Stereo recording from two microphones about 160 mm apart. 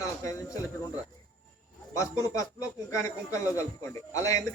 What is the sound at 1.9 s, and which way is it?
Speech, 20° left (ahead or behind).